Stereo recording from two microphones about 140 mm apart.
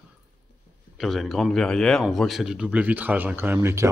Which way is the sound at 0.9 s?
Centre (ahead or behind).